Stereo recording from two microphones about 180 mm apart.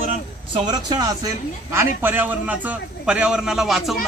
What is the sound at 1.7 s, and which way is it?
A man's voice, 10° right (ahead or behind).